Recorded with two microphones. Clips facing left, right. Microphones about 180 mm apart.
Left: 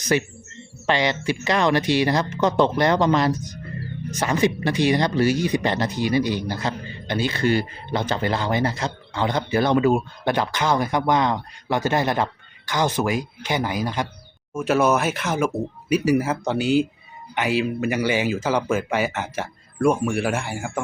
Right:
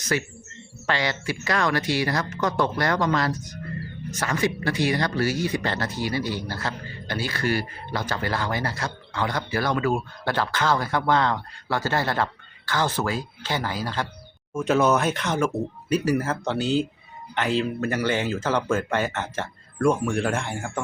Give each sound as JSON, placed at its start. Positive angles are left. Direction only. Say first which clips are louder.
{"t": 0.0, "sound": "speech", "louder": "left 5 dB", "side_deg": 20}
{"t": 14.5, "sound": "speech", "louder": "left 1 dB", "side_deg": 5}